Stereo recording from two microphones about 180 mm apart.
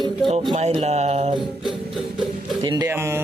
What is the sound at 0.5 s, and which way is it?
Music, 35° right (ahead or behind).